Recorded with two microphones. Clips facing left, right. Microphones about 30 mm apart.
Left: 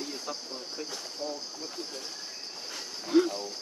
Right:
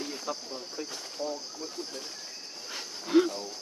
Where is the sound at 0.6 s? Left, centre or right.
Centre.